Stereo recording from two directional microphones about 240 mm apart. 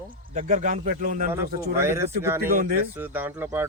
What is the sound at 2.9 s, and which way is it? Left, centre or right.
Speech, centre.